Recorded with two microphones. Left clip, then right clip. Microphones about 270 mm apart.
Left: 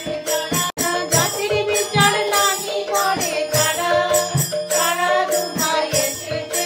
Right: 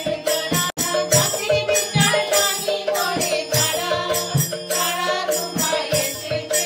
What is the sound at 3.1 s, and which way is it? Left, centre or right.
Music, left.